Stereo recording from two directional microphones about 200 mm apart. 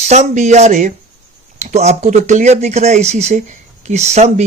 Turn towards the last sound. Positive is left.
turn(degrees=-35)  # may be behind; listen again after turning